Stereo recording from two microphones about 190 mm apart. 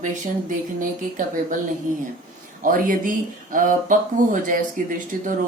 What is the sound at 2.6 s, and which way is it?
Speech, 45° right (ahead or behind).